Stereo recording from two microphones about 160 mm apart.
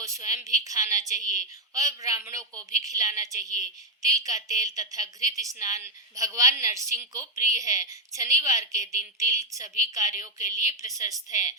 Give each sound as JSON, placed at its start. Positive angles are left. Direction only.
{"t": 0.0, "sound": "a woman's voice", "side_deg": -20}